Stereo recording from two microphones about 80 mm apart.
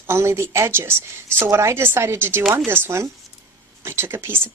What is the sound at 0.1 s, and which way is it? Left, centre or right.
Speech, right.